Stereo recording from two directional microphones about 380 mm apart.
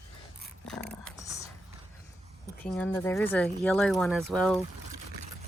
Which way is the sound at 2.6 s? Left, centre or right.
Centre.